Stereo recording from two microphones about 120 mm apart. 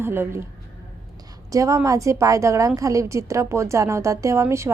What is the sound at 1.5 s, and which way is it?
A woman's voice, 25° right (ahead or behind).